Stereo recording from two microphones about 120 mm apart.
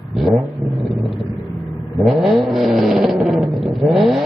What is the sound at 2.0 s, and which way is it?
Vehicle, centre (ahead or behind).